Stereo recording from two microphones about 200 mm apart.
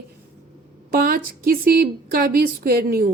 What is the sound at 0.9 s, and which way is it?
A woman's voice, 45° right (ahead or behind).